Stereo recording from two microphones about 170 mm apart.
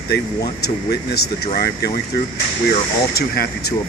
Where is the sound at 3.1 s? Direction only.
65° left (ahead or behind).